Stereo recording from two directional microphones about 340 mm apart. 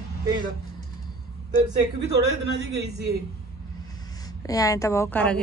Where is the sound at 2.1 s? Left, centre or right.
Right.